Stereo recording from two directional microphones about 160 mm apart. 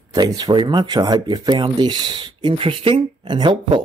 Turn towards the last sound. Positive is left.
turn(degrees=-25)  # may be behind; listen again after turning